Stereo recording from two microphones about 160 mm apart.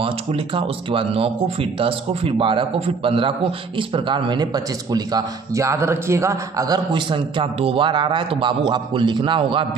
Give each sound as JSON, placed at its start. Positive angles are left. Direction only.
{"t": 0.0, "sound": "speech", "side_deg": -35}